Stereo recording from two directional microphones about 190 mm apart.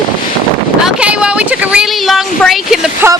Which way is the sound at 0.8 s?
5° right (ahead or behind).